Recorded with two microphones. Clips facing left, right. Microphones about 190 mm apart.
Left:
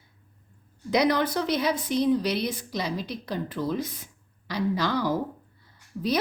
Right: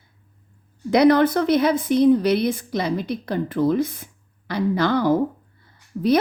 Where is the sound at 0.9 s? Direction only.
55° right (ahead or behind).